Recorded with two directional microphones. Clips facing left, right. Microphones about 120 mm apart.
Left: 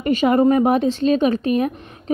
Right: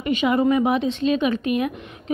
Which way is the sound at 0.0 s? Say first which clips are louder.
Left 4 dB; 45° left (ahead or behind).